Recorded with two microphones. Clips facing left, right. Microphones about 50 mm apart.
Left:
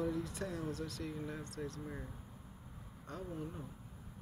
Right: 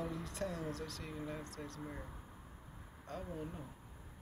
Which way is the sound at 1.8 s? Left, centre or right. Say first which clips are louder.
Left 1 dB; centre.